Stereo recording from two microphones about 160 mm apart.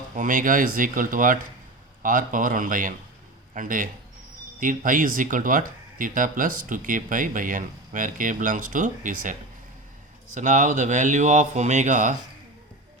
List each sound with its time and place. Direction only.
0.2 s speech: 55° right (ahead or behind)